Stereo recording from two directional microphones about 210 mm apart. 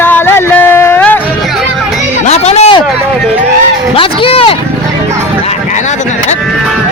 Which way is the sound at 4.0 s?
25° left (ahead or behind).